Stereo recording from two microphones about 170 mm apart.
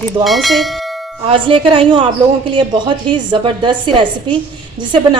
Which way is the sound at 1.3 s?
30° right (ahead or behind).